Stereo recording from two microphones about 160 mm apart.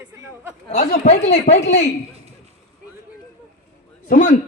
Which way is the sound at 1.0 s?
40° left (ahead or behind).